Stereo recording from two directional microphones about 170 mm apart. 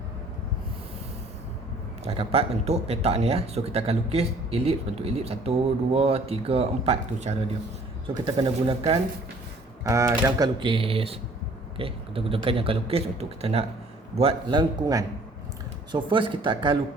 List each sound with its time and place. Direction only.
2.0 s speech: 35° right (ahead or behind)
8.0 s speech: 30° right (ahead or behind)
9.8 s speech: 15° right (ahead or behind)